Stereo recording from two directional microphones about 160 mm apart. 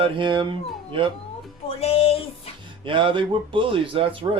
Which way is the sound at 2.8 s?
30° right (ahead or behind).